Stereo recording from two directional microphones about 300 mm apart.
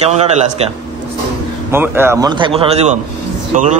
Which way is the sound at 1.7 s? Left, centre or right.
Centre.